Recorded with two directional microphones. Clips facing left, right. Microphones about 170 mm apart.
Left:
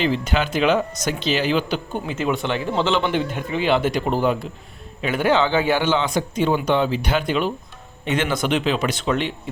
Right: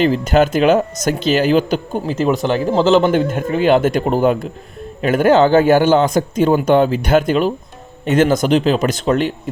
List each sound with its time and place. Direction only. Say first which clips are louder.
0.0 s speech: right 8 dB; 45° right (ahead or behind)